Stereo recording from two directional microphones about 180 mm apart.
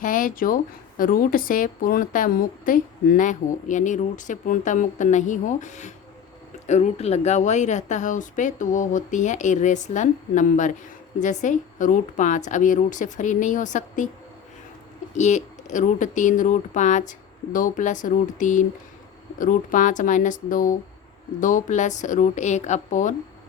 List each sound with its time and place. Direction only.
0.0 s a woman's voice: 50° left (ahead or behind)
15.1 s a woman's voice: 40° left (ahead or behind)